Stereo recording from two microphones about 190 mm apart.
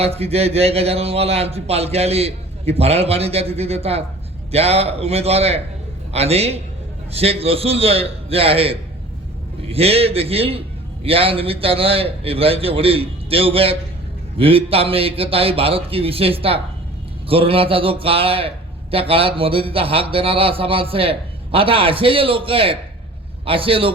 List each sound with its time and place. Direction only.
0.0 s a man's voice: 30° right (ahead or behind)